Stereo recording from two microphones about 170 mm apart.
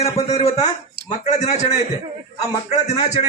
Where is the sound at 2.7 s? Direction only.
40° left (ahead or behind).